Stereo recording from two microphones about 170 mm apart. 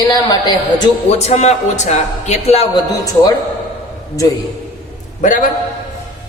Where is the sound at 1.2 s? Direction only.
40° left (ahead or behind).